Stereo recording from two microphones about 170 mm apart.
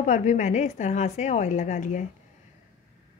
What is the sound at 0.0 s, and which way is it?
A woman's voice, 45° left (ahead or behind).